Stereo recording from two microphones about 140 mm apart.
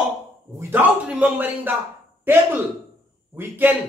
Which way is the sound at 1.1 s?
10° right (ahead or behind).